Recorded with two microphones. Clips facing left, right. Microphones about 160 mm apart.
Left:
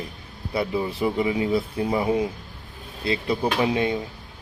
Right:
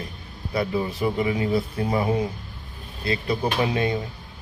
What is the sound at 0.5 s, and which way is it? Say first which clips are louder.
Speech: even; 25° left (ahead or behind).